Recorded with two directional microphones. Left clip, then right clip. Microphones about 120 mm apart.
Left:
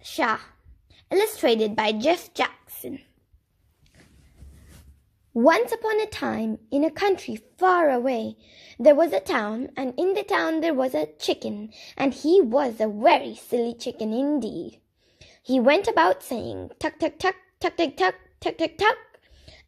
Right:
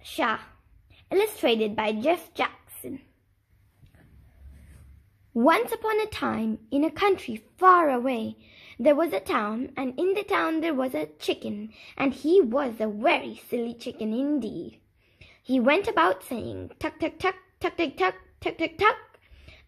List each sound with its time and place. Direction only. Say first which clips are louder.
0.0 s a woman's voice: left 2 dB; 50° left (ahead or behind)
5.3 s a woman's voice: left 3 dB; 20° left (ahead or behind)